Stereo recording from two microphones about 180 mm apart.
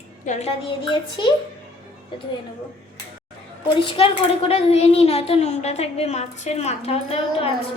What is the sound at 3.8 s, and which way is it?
A child's voice, 30° left (ahead or behind).